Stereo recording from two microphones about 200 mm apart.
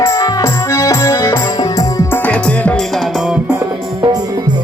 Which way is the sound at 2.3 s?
5° left (ahead or behind).